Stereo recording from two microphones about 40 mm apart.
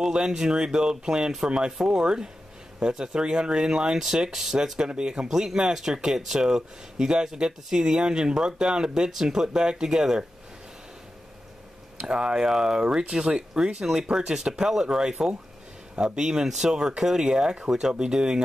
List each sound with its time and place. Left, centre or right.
0.0 s speech: centre
4.7 s speech: right
12.1 s speech: right